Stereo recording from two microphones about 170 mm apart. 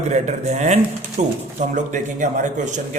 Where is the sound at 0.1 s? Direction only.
45° right (ahead or behind).